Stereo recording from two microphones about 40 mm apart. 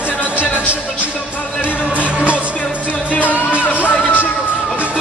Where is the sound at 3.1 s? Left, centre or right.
Left.